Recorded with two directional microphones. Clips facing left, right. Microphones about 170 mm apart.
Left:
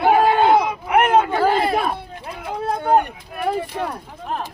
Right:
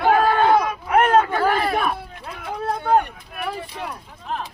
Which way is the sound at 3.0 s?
45° left (ahead or behind).